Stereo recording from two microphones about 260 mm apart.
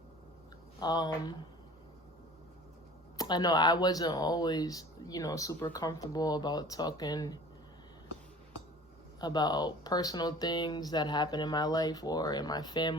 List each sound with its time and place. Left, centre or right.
0.8 s speech: centre
3.2 s speech: centre
9.2 s speech: centre